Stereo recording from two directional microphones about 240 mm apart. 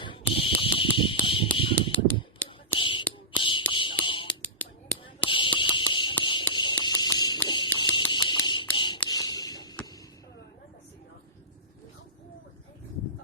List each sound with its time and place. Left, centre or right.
0.0 s fire alarm: left
1.5 s a sound: left
4.0 s whispering: left
4.3 s finger snapping: centre
5.2 s fire alarm: left
7.8 s a sound: centre